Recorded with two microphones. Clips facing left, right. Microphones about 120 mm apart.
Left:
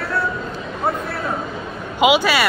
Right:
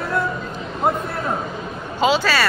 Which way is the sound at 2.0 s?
15° left (ahead or behind).